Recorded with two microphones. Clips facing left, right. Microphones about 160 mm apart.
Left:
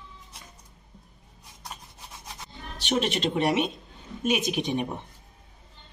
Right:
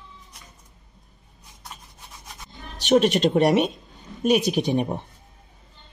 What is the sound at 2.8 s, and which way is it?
A woman's voice, 45° right (ahead or behind).